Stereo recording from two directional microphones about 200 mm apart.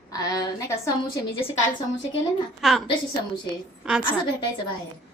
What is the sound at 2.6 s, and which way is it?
Speech, centre (ahead or behind).